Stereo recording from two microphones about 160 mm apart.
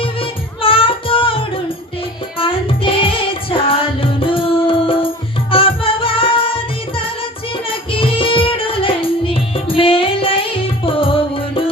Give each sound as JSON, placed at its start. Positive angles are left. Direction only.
{"t": 0.0, "sound": "music", "side_deg": 35}